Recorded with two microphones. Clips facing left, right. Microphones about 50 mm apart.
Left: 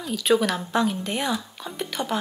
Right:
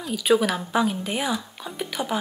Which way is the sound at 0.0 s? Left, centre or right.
Centre.